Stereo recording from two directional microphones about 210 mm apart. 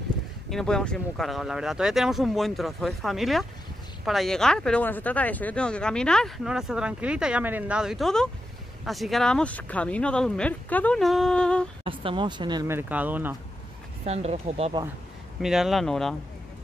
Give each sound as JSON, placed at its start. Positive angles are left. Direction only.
{"t": 0.5, "sound": "speech", "side_deg": 5}
{"t": 11.8, "sound": "speech", "side_deg": -25}
{"t": 14.0, "sound": "speech", "side_deg": -30}
{"t": 15.4, "sound": "speech", "side_deg": 0}